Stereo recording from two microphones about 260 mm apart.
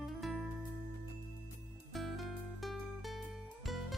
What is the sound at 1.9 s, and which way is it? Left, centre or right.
Music, centre.